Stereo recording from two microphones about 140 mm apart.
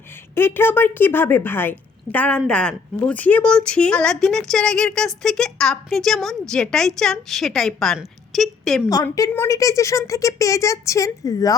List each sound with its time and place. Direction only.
0.3 s a woman's voice: 15° left (ahead or behind)
9.3 s a woman's voice: 20° left (ahead or behind)